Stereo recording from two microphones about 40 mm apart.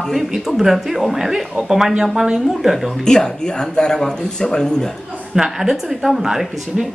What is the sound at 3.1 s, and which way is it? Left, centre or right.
Speech, centre.